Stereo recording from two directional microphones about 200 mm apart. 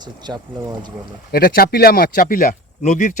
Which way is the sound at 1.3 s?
50° left (ahead or behind).